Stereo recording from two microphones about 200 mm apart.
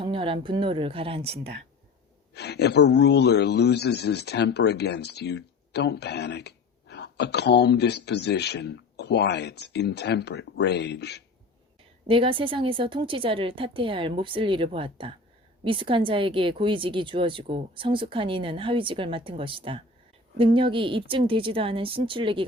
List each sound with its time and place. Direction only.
0.0 s a woman's voice: 25° right (ahead or behind)
2.3 s speech: 55° left (ahead or behind)
12.0 s a woman's voice: 25° right (ahead or behind)